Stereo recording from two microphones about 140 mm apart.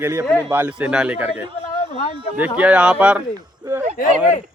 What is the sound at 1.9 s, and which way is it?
Speech, 50° left (ahead or behind).